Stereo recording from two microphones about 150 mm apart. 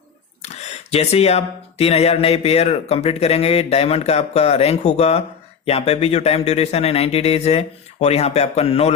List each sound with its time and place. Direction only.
0.4 s speech: 45° left (ahead or behind)